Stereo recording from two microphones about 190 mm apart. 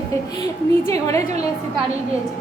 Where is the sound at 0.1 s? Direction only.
20° left (ahead or behind).